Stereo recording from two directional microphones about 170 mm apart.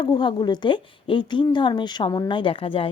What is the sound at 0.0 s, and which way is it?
Speech, 25° left (ahead or behind).